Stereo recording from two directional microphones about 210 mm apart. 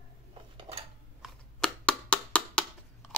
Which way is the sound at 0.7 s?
30° right (ahead or behind).